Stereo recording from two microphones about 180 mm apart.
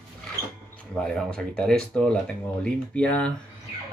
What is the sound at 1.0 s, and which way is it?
Speech, 5° left (ahead or behind).